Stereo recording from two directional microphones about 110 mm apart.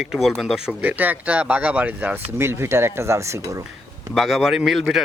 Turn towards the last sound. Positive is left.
turn(degrees=0)  # may be behind; listen again after turning